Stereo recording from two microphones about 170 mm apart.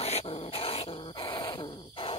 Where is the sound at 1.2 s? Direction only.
25° left (ahead or behind).